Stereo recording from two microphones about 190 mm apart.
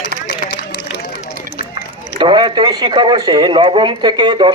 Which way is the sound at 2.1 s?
25° right (ahead or behind).